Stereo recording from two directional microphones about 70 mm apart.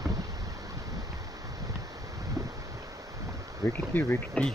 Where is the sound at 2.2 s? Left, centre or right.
Right.